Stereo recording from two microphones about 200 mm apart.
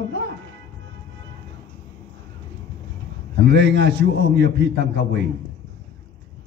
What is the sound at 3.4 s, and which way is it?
A man's voice, 60° right (ahead or behind).